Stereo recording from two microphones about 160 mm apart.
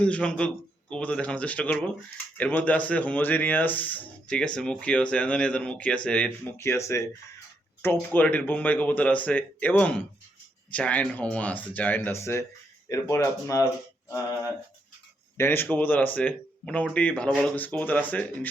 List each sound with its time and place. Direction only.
0.0 s speech: 5° left (ahead or behind)
15.4 s speech: 15° left (ahead or behind)